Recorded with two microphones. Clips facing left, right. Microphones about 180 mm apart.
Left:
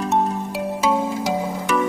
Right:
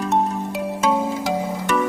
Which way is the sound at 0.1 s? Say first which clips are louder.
Right 1 dB; 5° left (ahead or behind).